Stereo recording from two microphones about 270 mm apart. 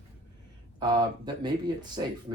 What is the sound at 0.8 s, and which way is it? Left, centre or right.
Speech, centre.